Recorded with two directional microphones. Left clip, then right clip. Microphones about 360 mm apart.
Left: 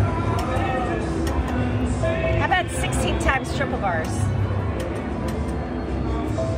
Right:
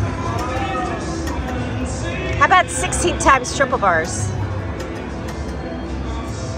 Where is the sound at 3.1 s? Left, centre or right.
Centre.